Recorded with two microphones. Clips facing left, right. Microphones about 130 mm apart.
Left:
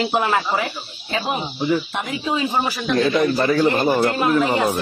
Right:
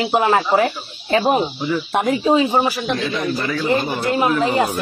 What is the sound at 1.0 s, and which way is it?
Speech, 50° right (ahead or behind).